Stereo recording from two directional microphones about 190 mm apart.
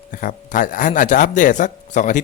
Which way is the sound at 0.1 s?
45° left (ahead or behind).